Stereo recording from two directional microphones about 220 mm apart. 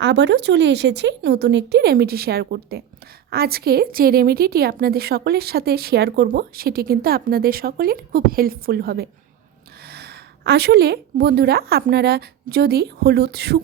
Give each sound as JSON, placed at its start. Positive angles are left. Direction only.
{"t": 0.0, "sound": "a woman's voice", "side_deg": -55}